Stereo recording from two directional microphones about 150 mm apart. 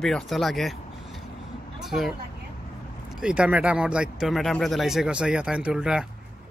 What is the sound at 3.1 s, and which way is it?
Speech, 5° right (ahead or behind).